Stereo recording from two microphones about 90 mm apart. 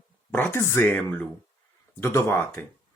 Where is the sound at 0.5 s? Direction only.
25° left (ahead or behind).